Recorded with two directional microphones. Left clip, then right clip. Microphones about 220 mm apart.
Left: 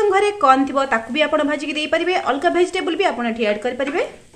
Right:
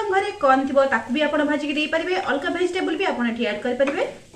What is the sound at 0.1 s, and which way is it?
A woman's voice, 55° left (ahead or behind).